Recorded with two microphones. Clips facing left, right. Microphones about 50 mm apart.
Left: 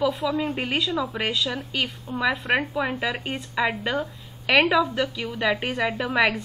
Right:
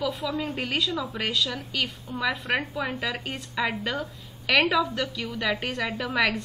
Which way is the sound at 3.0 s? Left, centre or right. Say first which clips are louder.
Left 3 dB; left.